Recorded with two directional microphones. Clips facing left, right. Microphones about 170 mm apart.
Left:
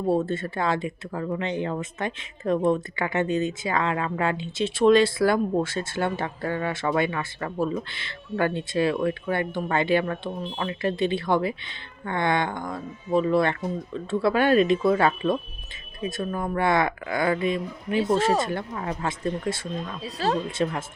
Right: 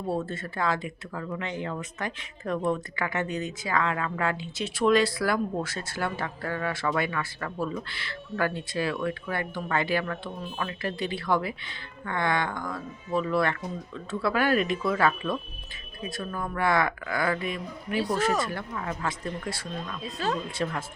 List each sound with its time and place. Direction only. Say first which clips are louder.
0.1 s speech: left 6 dB; 25° left (ahead or behind)
20.0 s speech: left 4 dB; 35° left (ahead or behind)
20.6 s speech: left 5 dB; 25° left (ahead or behind)